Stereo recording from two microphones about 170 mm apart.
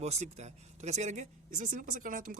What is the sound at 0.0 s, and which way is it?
Speech, 40° right (ahead or behind).